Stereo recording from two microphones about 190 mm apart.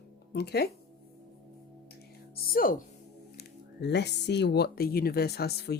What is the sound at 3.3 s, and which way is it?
Speech, 60° left (ahead or behind).